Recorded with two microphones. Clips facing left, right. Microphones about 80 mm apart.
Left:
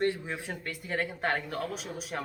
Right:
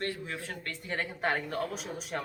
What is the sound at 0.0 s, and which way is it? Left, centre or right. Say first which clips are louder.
Speech: left 5 dB; centre.